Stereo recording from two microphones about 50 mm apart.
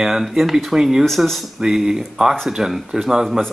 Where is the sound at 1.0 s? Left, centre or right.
Centre.